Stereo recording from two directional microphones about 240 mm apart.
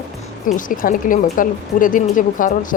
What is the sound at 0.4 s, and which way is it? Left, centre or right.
Speech, left.